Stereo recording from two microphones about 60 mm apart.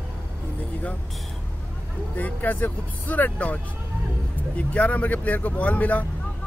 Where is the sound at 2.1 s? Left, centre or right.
Left.